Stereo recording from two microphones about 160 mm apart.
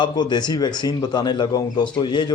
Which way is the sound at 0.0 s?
25° left (ahead or behind).